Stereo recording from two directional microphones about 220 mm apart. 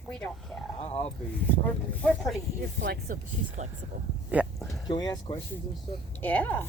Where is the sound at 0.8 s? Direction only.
30° left (ahead or behind).